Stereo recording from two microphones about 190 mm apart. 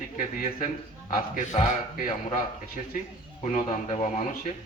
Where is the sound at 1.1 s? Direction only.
45° left (ahead or behind).